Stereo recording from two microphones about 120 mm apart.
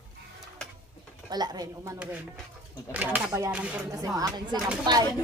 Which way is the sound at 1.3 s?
35° right (ahead or behind).